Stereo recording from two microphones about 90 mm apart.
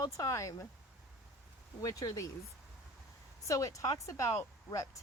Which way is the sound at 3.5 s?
40° left (ahead or behind).